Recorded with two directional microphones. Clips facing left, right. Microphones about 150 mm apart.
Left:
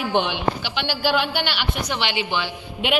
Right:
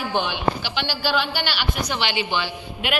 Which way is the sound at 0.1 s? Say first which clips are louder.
Left 1 dB; 20° left (ahead or behind).